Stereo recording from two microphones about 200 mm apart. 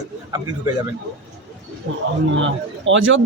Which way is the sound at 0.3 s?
15° right (ahead or behind).